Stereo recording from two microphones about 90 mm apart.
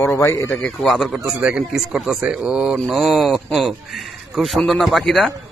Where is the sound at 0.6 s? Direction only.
5° left (ahead or behind).